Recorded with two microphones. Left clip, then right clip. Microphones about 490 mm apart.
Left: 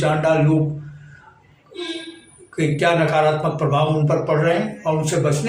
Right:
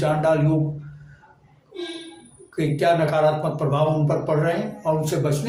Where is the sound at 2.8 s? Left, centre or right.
Right.